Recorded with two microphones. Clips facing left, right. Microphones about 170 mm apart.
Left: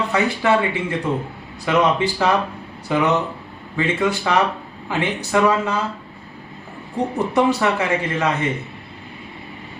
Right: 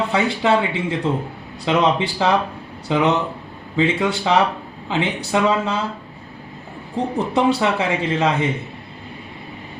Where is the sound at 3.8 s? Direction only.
20° right (ahead or behind).